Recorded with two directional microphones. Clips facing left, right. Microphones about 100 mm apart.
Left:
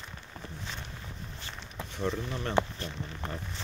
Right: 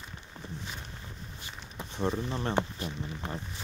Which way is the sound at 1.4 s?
15° right (ahead or behind).